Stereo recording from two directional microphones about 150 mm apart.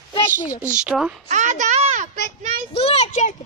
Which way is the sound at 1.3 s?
55° right (ahead or behind).